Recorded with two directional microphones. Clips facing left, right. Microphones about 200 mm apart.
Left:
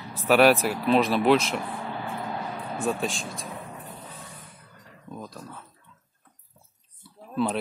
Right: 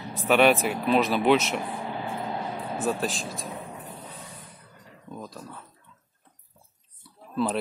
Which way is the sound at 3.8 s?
Centre (ahead or behind).